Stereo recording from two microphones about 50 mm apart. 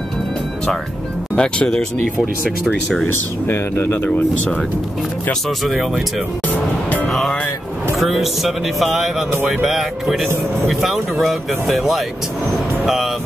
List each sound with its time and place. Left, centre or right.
1.3 s speech: centre
3.4 s speech: left
5.6 s speech: centre
7.1 s music: centre
8.0 s speech: centre